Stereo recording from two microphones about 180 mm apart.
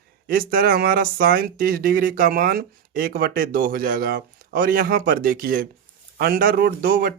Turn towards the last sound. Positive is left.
turn(degrees=-50)  # may be behind; listen again after turning